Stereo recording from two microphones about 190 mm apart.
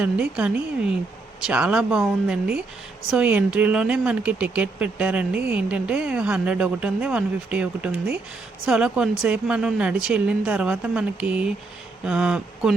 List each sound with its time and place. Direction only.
0.0 s speech: 5° right (ahead or behind)